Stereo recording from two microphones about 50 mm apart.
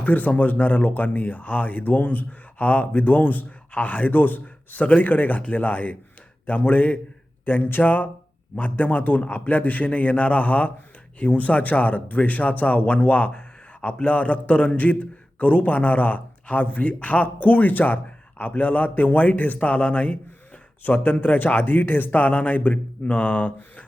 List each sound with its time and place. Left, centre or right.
0.0 s a man's voice: left